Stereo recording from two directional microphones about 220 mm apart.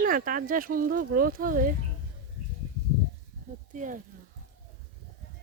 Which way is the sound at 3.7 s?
35° right (ahead or behind).